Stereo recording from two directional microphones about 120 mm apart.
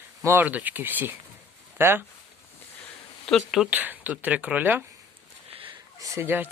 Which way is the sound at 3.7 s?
15° right (ahead or behind).